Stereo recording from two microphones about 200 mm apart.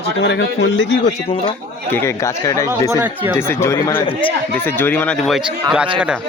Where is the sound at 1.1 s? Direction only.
30° left (ahead or behind).